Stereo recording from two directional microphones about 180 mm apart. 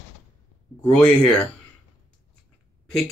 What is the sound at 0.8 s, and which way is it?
Speech, 5° left (ahead or behind).